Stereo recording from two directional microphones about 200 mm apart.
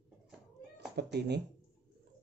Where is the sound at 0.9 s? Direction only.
55° right (ahead or behind).